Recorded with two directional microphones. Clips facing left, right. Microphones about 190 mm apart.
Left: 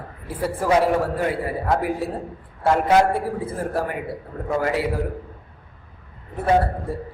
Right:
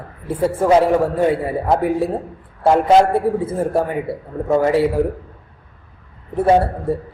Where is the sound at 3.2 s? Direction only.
25° right (ahead or behind).